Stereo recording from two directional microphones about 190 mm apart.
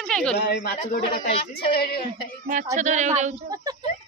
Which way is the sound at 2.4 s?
40° right (ahead or behind).